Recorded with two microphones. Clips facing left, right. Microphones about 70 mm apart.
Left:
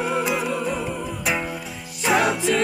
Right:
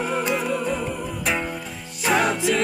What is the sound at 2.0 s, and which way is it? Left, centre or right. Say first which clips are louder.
Music: left 1 dB; centre.